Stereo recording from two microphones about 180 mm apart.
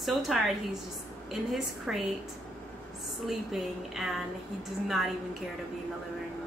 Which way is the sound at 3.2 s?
Centre (ahead or behind).